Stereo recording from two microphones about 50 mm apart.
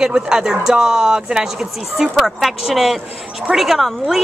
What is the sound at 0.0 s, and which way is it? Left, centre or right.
Speech, centre.